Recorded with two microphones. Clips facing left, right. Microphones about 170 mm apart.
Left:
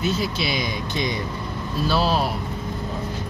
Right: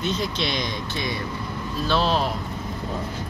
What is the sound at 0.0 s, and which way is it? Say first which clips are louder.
Speech: left 2 dB; 5° left (ahead or behind).